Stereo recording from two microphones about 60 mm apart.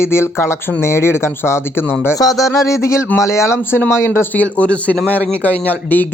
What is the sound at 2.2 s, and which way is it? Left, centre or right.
Speech, left.